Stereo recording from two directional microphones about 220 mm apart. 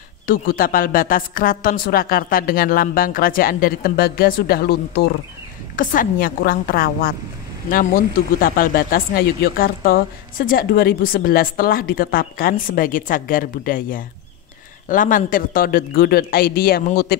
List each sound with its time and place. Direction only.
0.3 s a man's voice: 40° left (ahead or behind)